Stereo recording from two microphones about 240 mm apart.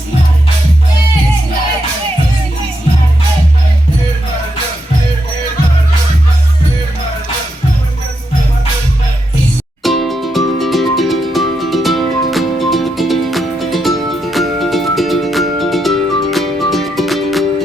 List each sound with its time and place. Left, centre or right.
9.8 s music: centre